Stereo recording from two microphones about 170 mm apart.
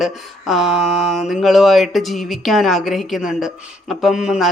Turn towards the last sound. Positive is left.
turn(degrees=-5)  # may be behind; listen again after turning